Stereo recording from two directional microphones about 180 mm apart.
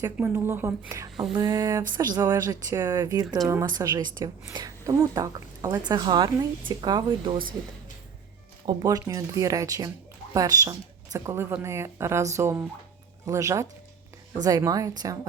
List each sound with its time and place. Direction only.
0.0 s speech: 15° right (ahead or behind)
1.3 s a woman's voice: 25° right (ahead or behind)
8.6 s a woman's voice: 20° right (ahead or behind)